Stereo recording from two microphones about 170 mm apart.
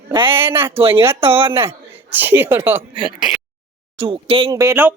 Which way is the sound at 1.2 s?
35° right (ahead or behind).